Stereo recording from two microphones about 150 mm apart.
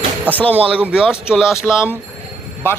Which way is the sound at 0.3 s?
10° left (ahead or behind).